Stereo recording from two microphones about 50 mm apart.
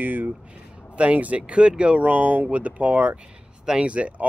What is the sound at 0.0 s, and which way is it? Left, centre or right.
Speech, right.